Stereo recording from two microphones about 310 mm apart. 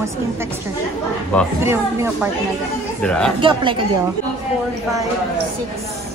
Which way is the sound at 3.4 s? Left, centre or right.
Centre.